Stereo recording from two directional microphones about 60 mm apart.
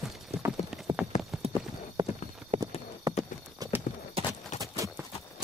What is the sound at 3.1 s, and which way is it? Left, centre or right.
Clip-clop, right.